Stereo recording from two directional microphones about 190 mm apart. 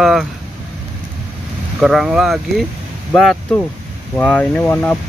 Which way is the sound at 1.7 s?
Centre (ahead or behind).